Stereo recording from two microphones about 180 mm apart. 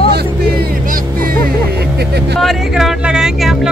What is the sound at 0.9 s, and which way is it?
Music, 50° right (ahead or behind).